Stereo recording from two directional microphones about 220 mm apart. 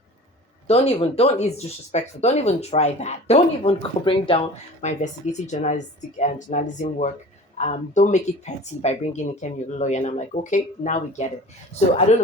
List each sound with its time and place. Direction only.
0.7 s speech: 25° left (ahead or behind)